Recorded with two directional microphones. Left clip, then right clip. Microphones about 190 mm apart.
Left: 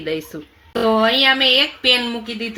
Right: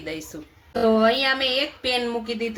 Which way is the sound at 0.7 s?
40° left (ahead or behind).